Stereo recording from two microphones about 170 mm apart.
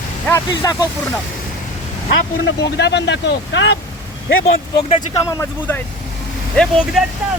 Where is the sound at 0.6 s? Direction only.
20° left (ahead or behind).